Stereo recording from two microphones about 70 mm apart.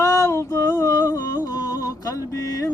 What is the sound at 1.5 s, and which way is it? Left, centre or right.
Music, left.